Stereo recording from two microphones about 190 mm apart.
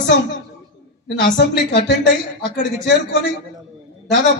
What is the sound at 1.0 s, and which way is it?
Speech, 65° left (ahead or behind).